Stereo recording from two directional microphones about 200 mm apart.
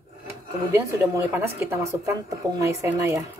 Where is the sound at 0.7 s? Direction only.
15° right (ahead or behind).